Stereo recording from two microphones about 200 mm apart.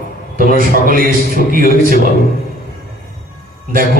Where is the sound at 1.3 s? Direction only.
45° right (ahead or behind).